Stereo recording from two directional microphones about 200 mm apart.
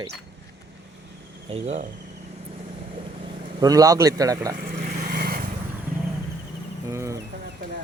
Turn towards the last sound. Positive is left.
turn(degrees=-15)  # may be behind; listen again after turning